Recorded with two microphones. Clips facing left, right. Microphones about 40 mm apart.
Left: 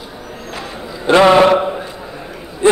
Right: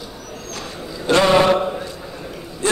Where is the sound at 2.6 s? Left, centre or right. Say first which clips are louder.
Left 9 dB; left.